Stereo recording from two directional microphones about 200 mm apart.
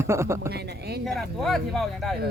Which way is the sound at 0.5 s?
55° right (ahead or behind).